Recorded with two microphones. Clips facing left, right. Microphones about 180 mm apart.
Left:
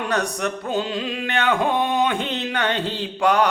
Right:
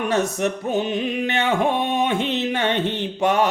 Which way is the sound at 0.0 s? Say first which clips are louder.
Right 3 dB; 25° right (ahead or behind).